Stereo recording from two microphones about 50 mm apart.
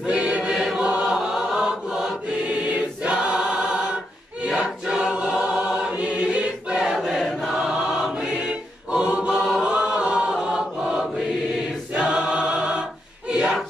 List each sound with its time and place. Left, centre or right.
0.0 s choir: centre
0.8 s choir: right
1.1 s chant: centre
2.7 s choir: right
8.9 s choir: centre
9.4 s chant: centre
11.9 s choir: centre
13.3 s a sound: centre